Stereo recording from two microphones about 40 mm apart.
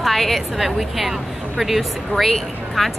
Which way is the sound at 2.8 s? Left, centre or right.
Centre.